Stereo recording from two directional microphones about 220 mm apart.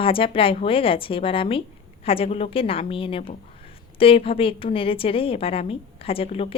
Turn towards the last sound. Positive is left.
turn(degrees=25)  # may be behind; listen again after turning